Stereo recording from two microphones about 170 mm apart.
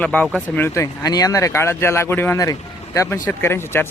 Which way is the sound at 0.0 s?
10° left (ahead or behind).